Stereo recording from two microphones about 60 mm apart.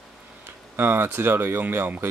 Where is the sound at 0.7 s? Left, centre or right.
Right.